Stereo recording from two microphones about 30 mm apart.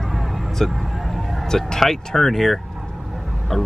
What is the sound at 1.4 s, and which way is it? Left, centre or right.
Speech, centre.